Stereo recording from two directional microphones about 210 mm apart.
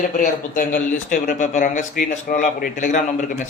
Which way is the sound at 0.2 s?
40° left (ahead or behind).